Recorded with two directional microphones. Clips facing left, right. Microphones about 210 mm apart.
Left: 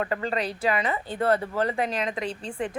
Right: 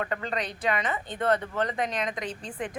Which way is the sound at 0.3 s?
5° left (ahead or behind).